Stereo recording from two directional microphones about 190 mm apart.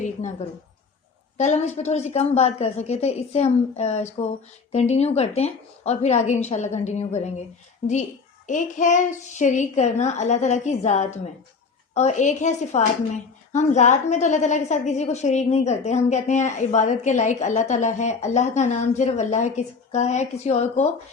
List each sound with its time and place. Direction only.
0.0 s a woman's voice: 40° left (ahead or behind)
8.4 s a woman's voice: 40° left (ahead or behind)